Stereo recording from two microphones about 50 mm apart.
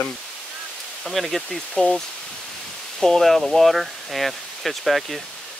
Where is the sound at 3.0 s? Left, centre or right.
Centre.